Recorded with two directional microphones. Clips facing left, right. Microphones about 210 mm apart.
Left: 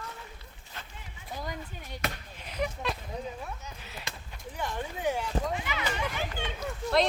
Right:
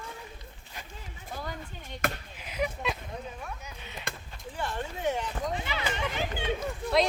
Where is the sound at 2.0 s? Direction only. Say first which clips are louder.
Right 3 dB; 50° right (ahead or behind).